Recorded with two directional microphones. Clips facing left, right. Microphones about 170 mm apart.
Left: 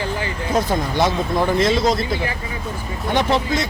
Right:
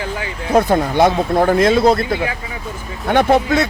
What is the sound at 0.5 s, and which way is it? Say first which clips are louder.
Speech: right 7 dB; 60° right (ahead or behind).